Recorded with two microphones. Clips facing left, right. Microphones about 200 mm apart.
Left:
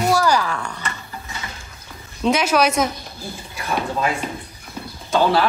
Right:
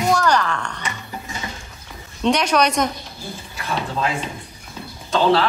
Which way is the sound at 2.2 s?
5° left (ahead or behind).